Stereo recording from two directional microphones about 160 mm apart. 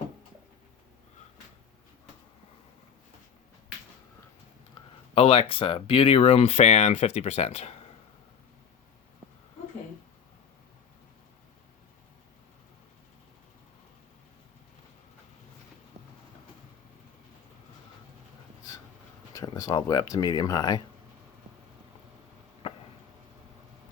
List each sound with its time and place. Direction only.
5.1 s speech: 35° left (ahead or behind)
19.3 s speech: 20° left (ahead or behind)
22.6 s a sound: 40° left (ahead or behind)